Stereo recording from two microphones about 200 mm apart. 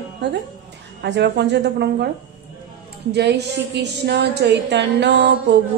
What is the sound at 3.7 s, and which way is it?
Music, 55° right (ahead or behind).